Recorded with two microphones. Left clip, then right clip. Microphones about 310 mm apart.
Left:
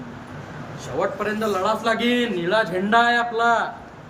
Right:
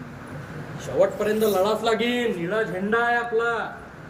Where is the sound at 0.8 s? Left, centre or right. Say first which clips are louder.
Right 3 dB; centre.